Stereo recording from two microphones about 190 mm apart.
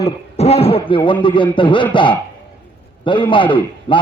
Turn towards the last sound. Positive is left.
turn(degrees=25)  # may be behind; listen again after turning